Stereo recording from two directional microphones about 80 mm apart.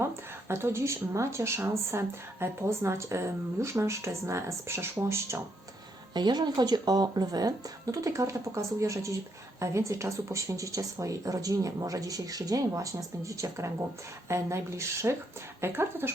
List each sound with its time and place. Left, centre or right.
0.0 s speech: right
6.1 s speech: right